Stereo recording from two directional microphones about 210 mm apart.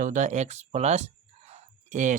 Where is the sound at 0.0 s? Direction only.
35° right (ahead or behind).